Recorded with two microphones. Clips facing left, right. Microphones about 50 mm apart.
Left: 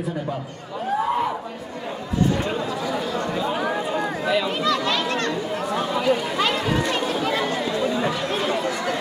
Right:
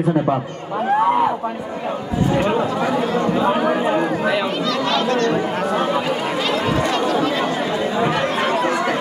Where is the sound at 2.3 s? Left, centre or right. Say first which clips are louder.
Right 7 dB; right.